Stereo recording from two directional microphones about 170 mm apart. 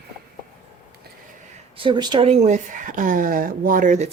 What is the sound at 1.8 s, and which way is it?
Speech, 25° right (ahead or behind).